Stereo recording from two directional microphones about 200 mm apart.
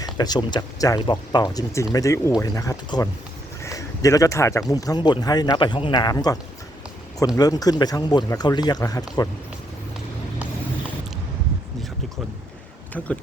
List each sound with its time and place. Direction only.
0.0 s speech: 20° left (ahead or behind)